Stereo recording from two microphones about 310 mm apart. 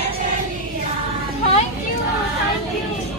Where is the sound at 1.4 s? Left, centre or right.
Left.